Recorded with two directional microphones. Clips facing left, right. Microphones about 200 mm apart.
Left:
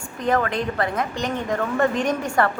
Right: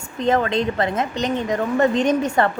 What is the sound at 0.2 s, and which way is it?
A woman's voice, 20° right (ahead or behind).